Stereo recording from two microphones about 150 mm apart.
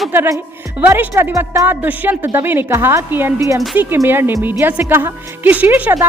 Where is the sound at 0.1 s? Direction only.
15° right (ahead or behind).